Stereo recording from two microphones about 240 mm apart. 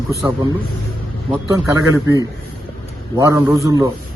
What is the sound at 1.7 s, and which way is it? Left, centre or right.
A man's voice, centre.